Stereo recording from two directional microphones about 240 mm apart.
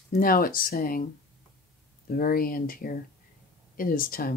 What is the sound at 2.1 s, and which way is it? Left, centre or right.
Speech, left.